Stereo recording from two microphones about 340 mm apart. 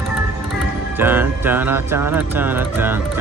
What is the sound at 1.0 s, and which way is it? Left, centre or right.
Music, centre.